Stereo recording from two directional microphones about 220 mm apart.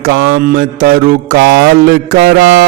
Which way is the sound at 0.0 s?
45° right (ahead or behind).